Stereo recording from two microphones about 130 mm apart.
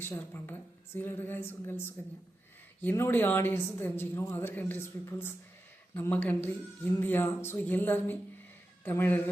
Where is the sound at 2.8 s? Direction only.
15° left (ahead or behind).